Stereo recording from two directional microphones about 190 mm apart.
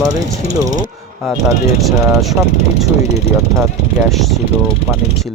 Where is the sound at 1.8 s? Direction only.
Centre (ahead or behind).